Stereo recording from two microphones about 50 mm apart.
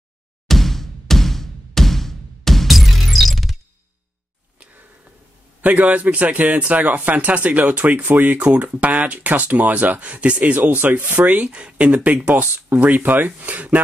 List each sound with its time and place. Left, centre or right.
0.5 s a sound: centre
5.6 s a man's voice: right
11.4 s a man's voice: right